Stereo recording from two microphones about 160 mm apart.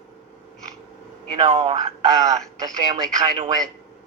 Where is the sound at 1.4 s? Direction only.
45° right (ahead or behind).